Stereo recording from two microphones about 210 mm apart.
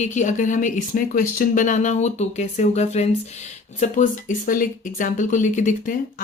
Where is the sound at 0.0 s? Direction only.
35° left (ahead or behind).